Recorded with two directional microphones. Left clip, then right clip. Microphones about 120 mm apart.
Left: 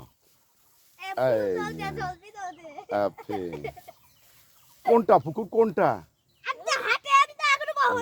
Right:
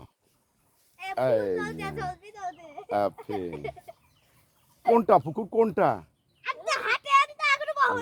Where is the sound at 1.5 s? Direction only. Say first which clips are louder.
Left 1 dB; 15° left (ahead or behind).